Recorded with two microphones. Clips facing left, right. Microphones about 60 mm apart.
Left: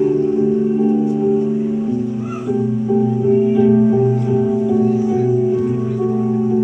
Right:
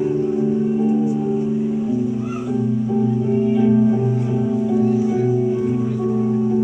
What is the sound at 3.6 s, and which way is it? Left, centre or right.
Music, centre.